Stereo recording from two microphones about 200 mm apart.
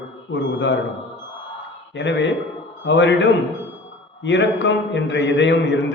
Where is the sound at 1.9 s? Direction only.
65° left (ahead or behind).